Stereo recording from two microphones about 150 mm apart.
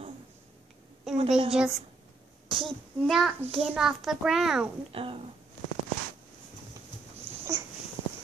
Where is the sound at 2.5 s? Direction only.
Centre (ahead or behind).